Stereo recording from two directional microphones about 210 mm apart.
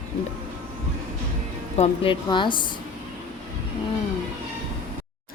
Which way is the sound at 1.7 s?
30° left (ahead or behind).